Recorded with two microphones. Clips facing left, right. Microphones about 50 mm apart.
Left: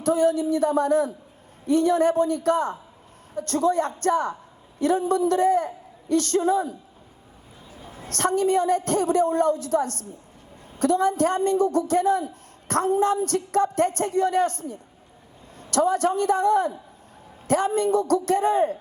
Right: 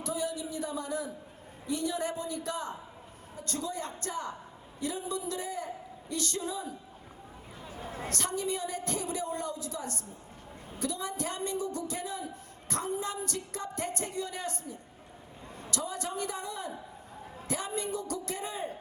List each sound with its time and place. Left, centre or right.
0.0 s a woman's voice: left
7.8 s a sound: right
8.1 s a woman's voice: left